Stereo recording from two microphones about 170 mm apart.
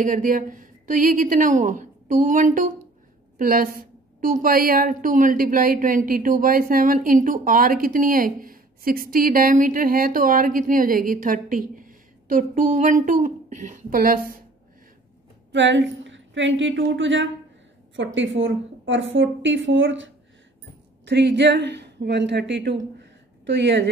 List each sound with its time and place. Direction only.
0.0 s a woman's voice: 50° right (ahead or behind)
15.5 s a woman's voice: 90° right
22.9 s a sound: 90° right